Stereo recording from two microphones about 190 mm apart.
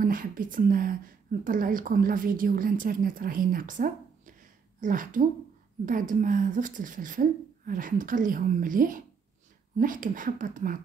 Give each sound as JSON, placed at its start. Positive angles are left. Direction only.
{"t": 0.0, "sound": "a woman's voice", "side_deg": -45}